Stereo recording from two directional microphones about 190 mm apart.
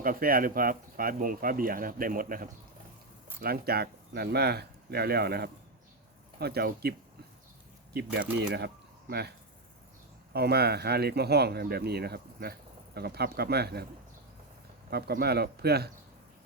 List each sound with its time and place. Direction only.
0.0 s speech: 50° right (ahead or behind)
7.9 s speech: 65° right (ahead or behind)
10.3 s speech: 55° right (ahead or behind)
14.8 s speech: 55° right (ahead or behind)